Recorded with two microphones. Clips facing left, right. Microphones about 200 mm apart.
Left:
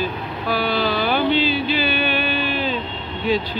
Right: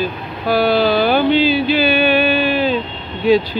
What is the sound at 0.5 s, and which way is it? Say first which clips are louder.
Vehicle: right 7 dB; 35° right (ahead or behind).